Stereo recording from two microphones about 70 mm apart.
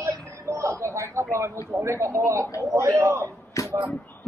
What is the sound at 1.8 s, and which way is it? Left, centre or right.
Speech, right.